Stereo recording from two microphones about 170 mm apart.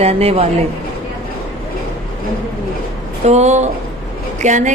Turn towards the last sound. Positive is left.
turn(degrees=-45)  # may be behind; listen again after turning